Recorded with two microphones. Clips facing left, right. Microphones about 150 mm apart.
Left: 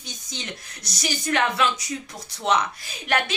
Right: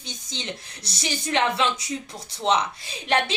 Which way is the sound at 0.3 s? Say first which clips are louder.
Right 2 dB; 25° right (ahead or behind).